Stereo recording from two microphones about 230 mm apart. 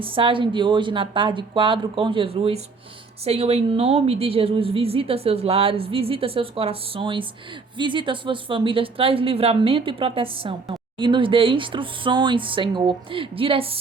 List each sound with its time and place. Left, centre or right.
0.0 s a woman's voice: right